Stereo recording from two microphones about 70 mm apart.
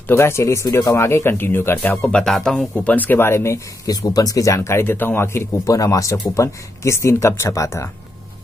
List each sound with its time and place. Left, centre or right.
0.1 s speech: left
2.0 s speech: centre; by 3.6 s left
3.8 s speech: left
4.6 s speech: left
5.7 s speech: left